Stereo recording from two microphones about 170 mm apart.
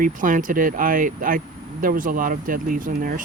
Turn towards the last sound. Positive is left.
turn(degrees=-55)  # may be behind; listen again after turning